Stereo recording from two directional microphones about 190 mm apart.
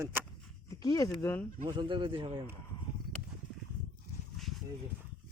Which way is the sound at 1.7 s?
25° right (ahead or behind).